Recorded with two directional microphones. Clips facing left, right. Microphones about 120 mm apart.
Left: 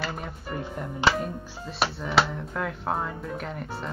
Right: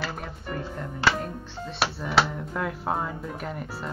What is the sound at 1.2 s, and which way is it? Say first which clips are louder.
Speech: left 1 dB; centre (ahead or behind).